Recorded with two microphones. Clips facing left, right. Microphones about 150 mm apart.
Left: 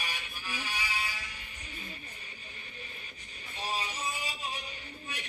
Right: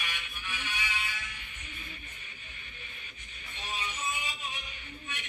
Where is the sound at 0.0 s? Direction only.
35° left (ahead or behind).